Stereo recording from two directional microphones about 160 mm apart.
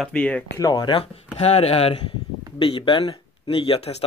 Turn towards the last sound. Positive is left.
turn(degrees=35)  # may be behind; listen again after turning